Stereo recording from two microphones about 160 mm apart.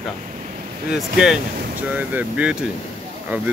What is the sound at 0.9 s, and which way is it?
Speech, 5° right (ahead or behind).